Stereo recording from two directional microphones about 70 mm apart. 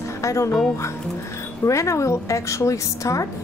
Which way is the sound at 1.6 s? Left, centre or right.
Left.